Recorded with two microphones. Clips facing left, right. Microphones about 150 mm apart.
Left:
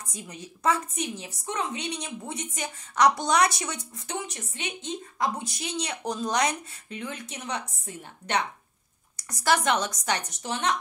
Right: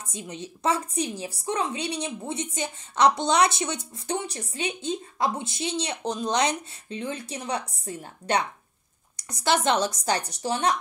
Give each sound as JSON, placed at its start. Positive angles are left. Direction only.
{"t": 0.0, "sound": "a woman's voice", "side_deg": -25}
{"t": 9.1, "sound": "a woman's voice", "side_deg": -25}